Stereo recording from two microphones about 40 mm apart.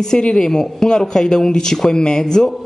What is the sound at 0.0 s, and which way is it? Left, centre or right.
Speech, centre.